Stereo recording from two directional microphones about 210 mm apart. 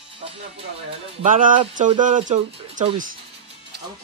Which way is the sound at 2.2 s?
35° right (ahead or behind).